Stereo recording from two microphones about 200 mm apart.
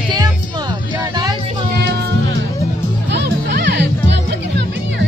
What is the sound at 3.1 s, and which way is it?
Music, 50° right (ahead or behind).